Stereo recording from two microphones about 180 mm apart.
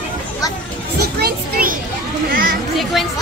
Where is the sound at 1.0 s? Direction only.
55° right (ahead or behind).